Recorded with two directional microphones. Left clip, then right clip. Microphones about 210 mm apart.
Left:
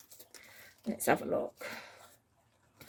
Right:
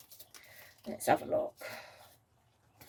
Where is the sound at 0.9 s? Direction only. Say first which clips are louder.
Right 1 dB; 50° left (ahead or behind).